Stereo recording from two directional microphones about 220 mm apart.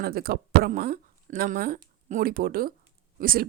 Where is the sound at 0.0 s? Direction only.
45° right (ahead or behind).